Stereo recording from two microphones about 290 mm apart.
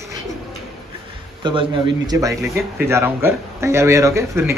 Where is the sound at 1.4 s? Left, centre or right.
Centre.